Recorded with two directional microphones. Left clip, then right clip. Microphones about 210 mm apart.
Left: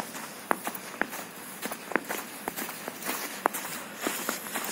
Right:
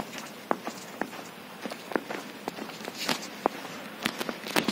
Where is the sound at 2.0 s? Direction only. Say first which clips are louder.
Left 2 dB; 15° left (ahead or behind).